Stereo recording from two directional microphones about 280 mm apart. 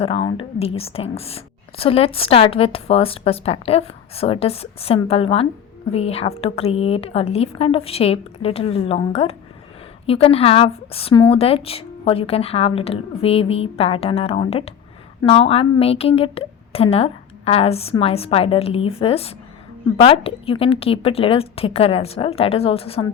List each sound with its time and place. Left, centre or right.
0.0 s a woman's voice: centre